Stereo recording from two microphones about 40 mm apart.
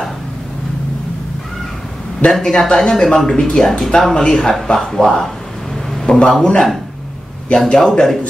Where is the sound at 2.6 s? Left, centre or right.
Centre.